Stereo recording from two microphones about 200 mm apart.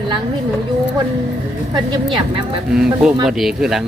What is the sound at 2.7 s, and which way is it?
Speech, 5° right (ahead or behind).